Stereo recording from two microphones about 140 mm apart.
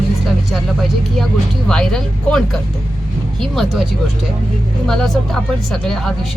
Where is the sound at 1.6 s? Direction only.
5° left (ahead or behind).